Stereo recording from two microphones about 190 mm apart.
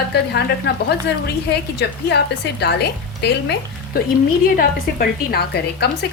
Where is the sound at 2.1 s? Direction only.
60° left (ahead or behind).